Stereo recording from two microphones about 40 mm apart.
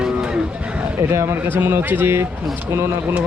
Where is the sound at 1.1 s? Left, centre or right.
Right.